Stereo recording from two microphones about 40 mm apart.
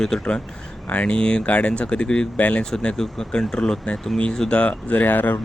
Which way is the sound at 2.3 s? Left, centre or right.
Left.